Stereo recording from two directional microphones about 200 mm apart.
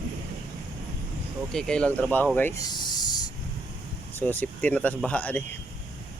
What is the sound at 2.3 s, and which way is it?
Snake, 10° left (ahead or behind).